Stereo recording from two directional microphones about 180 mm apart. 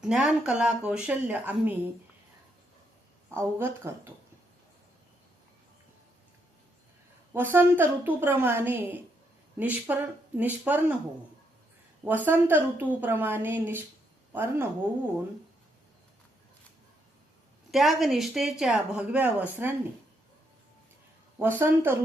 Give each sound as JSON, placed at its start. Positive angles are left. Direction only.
{"t": 0.0, "sound": "speech", "side_deg": 0}
{"t": 3.3, "sound": "a woman's voice", "side_deg": -15}
{"t": 7.3, "sound": "a woman's voice", "side_deg": -10}
{"t": 12.0, "sound": "a woman's voice", "side_deg": -10}
{"t": 17.7, "sound": "speech", "side_deg": 0}
{"t": 21.6, "sound": "a woman's voice", "side_deg": -10}